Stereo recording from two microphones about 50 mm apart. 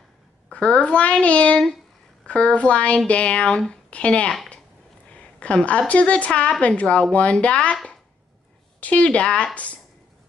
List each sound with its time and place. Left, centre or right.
0.5 s speech: left
8.8 s speech: left